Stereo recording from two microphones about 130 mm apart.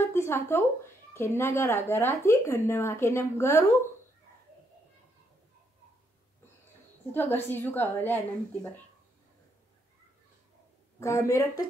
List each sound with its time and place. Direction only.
0.0 s speech: 20° left (ahead or behind)
7.1 s a woman's voice: 15° left (ahead or behind)
11.0 s speech: 20° left (ahead or behind)